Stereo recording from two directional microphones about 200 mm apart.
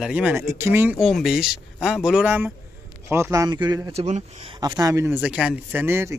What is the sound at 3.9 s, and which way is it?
Speech, 35° right (ahead or behind).